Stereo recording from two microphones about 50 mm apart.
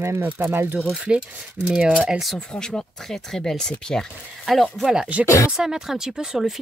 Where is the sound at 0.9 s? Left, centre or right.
Right.